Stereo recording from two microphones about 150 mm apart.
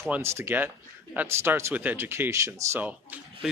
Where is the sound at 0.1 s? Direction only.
15° right (ahead or behind).